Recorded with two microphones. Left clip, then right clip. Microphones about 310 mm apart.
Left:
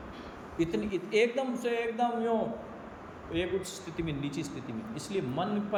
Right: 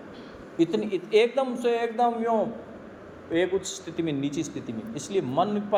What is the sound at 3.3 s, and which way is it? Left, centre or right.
Speech, centre.